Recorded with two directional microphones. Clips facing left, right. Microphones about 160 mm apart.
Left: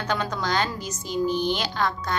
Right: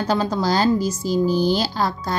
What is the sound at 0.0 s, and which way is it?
A child's voice, 30° right (ahead or behind).